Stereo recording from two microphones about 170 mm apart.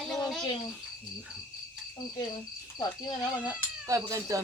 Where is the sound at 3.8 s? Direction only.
20° right (ahead or behind).